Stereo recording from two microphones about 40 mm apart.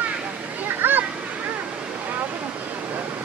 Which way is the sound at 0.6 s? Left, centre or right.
Right.